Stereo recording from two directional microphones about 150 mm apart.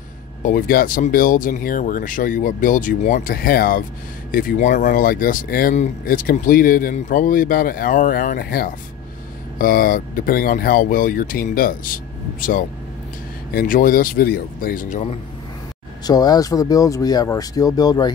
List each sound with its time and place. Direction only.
0.4 s speech: 65° left (ahead or behind)
13.5 s speech: 80° left; by 15.0 s 60° left (ahead or behind)
16.1 s speech: 25° left (ahead or behind)